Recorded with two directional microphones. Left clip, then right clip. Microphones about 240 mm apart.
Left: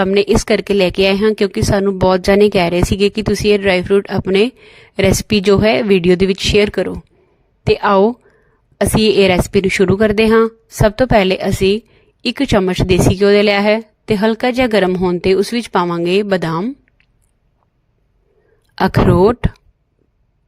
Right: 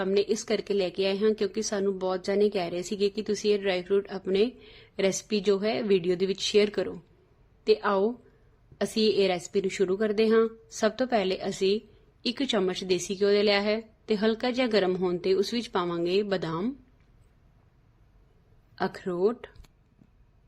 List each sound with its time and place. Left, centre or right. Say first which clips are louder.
0.0 s a woman's voice: left 13 dB; left
18.8 s a woman's voice: left 16 dB; left